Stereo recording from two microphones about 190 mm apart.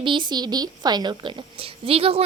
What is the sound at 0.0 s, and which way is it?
A woman's voice, 25° right (ahead or behind).